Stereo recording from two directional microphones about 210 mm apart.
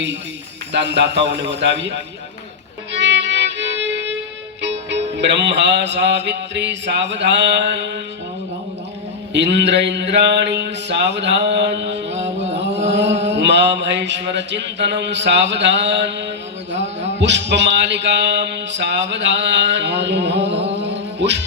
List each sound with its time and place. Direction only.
0.7 s mantra: 55° right (ahead or behind)
3.0 s music: 55° right (ahead or behind)
4.6 s mantra: 55° right (ahead or behind)
9.3 s mantra: 55° right (ahead or behind)
21.2 s music: 55° right (ahead or behind)